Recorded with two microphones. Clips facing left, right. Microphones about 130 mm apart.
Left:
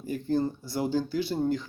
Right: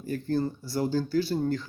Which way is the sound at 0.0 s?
15° left (ahead or behind).